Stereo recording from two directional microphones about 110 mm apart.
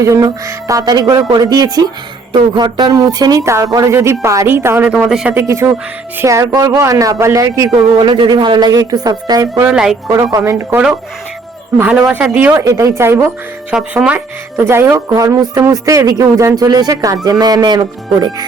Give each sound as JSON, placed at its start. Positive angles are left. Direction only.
{"t": 0.0, "sound": "speech", "side_deg": -30}
{"t": 4.9, "sound": "speech", "side_deg": -5}
{"t": 5.3, "sound": "speech", "side_deg": -25}
{"t": 7.9, "sound": "speech", "side_deg": -45}
{"t": 9.6, "sound": "speech", "side_deg": -5}
{"t": 10.1, "sound": "speech", "side_deg": -30}
{"t": 13.7, "sound": "speech", "side_deg": -10}
{"t": 14.6, "sound": "speech", "side_deg": -20}